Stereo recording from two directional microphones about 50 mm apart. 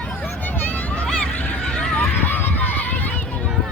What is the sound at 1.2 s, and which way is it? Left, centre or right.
Honk, left.